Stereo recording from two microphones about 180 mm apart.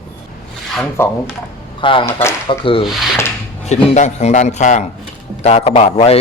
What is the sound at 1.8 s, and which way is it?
Speech, 30° left (ahead or behind).